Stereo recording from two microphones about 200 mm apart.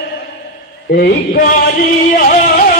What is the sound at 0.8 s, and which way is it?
Music, 50° left (ahead or behind).